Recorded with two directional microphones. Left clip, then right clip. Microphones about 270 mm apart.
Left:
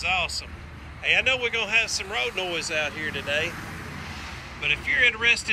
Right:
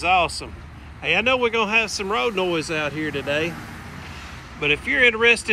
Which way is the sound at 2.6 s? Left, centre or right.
Centre.